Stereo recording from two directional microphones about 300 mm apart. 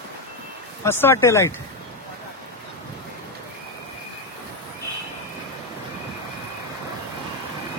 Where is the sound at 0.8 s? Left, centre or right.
Centre.